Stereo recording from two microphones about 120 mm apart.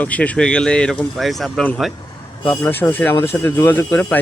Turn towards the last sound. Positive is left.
turn(degrees=20)  # may be behind; listen again after turning